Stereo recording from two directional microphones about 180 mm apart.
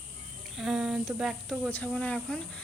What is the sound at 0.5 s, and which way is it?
Speech, centre (ahead or behind).